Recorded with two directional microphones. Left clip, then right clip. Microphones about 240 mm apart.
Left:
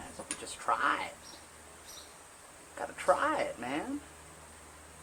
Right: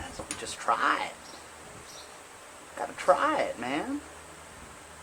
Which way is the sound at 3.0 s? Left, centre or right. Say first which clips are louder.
Right 4 dB; centre.